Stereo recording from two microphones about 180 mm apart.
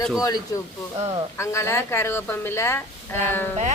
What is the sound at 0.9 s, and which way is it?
Speech, 30° right (ahead or behind).